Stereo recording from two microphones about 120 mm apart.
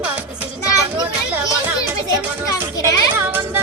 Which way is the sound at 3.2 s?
15° right (ahead or behind).